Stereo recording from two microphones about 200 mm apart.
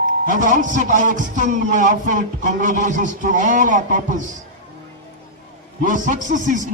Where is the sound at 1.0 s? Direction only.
40° right (ahead or behind).